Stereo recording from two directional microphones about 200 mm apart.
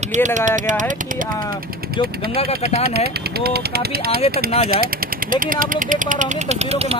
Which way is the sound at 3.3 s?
50° right (ahead or behind).